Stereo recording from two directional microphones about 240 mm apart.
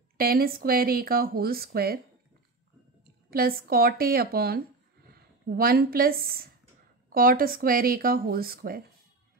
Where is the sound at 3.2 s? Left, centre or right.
Right.